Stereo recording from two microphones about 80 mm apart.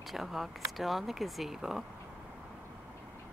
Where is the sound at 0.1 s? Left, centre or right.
Centre.